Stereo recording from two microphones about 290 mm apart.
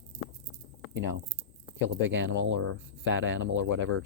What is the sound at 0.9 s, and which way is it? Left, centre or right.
Speech, right.